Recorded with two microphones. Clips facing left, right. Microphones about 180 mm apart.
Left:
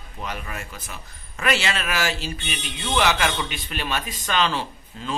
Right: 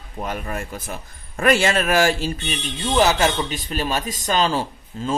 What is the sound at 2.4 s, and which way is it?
Speech, 35° right (ahead or behind).